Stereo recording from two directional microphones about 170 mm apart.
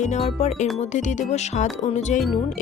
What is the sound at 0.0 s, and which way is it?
Speech, 40° left (ahead or behind).